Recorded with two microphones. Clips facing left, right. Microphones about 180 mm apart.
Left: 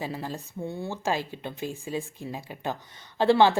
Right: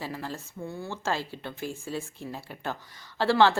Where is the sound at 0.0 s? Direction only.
15° left (ahead or behind).